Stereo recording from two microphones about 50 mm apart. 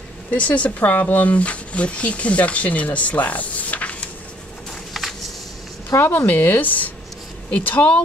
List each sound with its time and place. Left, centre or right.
0.3 s speech: left
4.9 s a sound: centre
5.9 s speech: left